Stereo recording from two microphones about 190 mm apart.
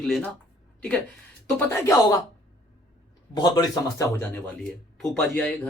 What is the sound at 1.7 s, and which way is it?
Speech, 15° left (ahead or behind).